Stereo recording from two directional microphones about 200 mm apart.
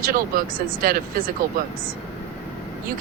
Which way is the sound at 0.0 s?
45° right (ahead or behind).